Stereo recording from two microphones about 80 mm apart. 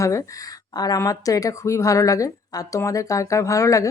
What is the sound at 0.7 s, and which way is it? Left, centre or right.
A woman's voice, left.